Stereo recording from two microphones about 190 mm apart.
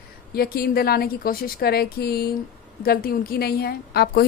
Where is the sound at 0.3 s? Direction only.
55° left (ahead or behind).